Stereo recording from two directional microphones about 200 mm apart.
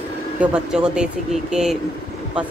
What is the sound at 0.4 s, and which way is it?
Speech, 5° right (ahead or behind).